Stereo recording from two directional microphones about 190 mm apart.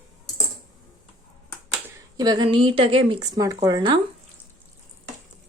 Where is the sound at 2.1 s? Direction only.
20° right (ahead or behind).